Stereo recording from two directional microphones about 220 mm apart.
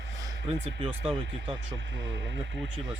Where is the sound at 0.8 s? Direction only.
25° right (ahead or behind).